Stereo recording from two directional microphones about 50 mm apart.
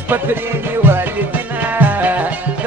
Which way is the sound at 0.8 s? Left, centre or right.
Right.